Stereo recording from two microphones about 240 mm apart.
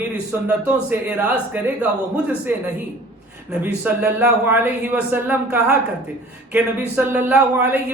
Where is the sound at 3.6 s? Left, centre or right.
Centre.